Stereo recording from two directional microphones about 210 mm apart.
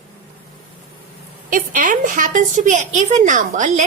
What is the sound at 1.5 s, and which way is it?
A woman's voice, 40° right (ahead or behind).